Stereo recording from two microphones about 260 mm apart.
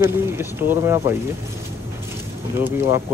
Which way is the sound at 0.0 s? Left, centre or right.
Centre.